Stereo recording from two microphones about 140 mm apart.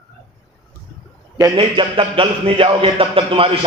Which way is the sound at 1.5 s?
40° right (ahead or behind).